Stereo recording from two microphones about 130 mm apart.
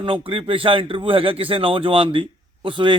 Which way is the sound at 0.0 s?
45° right (ahead or behind).